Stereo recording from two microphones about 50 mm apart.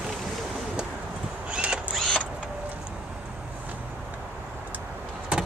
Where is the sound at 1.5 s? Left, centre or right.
Right.